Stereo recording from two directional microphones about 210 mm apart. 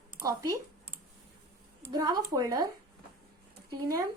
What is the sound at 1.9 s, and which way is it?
Speech, 20° right (ahead or behind).